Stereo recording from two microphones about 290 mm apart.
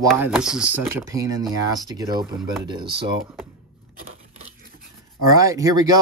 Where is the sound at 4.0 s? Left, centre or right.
Right.